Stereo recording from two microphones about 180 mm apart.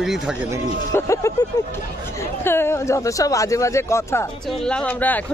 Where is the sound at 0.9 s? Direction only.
15° left (ahead or behind).